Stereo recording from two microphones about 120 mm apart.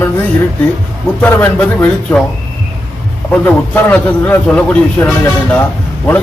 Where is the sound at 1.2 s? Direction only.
15° left (ahead or behind).